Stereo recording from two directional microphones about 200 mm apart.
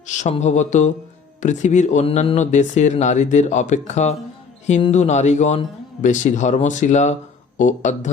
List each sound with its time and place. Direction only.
0.1 s speech: 35° left (ahead or behind)